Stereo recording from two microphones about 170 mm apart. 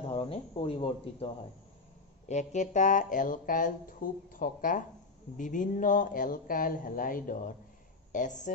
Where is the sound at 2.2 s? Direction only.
45° left (ahead or behind).